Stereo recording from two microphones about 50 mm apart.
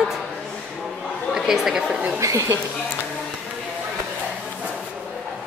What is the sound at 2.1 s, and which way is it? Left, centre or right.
Speech, right.